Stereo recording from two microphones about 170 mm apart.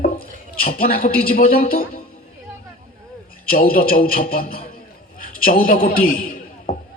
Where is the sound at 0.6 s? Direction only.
60° left (ahead or behind).